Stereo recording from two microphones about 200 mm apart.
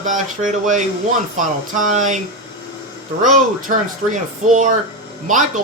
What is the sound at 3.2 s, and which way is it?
Speech, 40° right (ahead or behind).